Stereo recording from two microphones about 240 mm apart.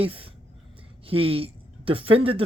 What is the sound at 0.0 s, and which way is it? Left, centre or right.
Speech, right.